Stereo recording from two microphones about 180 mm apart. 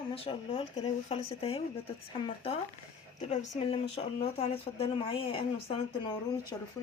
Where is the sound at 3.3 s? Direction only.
40° left (ahead or behind).